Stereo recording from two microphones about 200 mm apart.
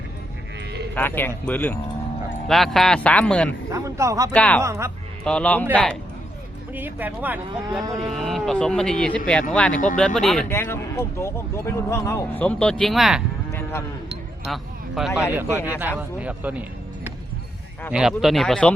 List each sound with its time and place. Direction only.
0.9 s speech: 10° left (ahead or behind)
2.5 s cattle: centre (ahead or behind)
3.7 s a man's voice: 15° right (ahead or behind)
4.3 s speech: 5° left (ahead or behind)
4.6 s a man's voice: 15° right (ahead or behind)
5.2 s cattle: 5° left (ahead or behind)
6.7 s cattle: 10° right (ahead or behind)
10.5 s speech: 10° left (ahead or behind)
14.4 s a sound: centre (ahead or behind)
15.3 s a man's voice: 10° right (ahead or behind)
17.9 s cattle: centre (ahead or behind)